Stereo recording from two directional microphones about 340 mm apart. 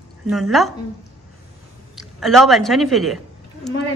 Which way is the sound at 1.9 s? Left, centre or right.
Centre.